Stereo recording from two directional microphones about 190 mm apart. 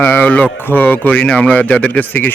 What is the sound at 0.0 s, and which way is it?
Speech, 10° left (ahead or behind).